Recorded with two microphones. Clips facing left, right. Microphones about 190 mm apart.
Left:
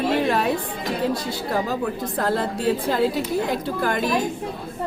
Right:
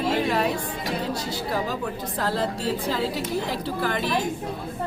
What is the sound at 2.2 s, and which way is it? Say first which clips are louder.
Speech: left 3 dB; 55° left (ahead or behind).